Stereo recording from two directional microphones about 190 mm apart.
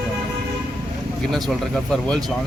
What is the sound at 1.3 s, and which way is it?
Speech, centre (ahead or behind).